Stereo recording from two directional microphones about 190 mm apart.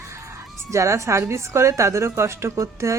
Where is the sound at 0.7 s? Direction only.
15° right (ahead or behind).